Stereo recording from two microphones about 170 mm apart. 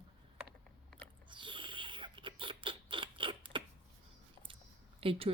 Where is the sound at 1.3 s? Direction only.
30° right (ahead or behind).